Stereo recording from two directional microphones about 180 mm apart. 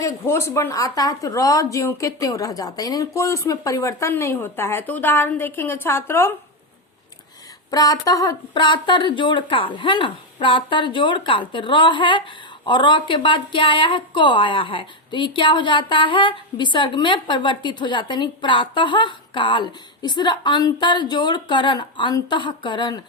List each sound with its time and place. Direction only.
0.0 s a woman's voice: 15° left (ahead or behind)
7.7 s a woman's voice: 20° left (ahead or behind)